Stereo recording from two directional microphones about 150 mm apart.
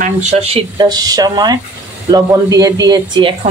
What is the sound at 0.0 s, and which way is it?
Speech, 50° right (ahead or behind).